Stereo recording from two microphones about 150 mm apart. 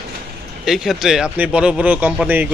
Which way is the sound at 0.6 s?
Centre (ahead or behind).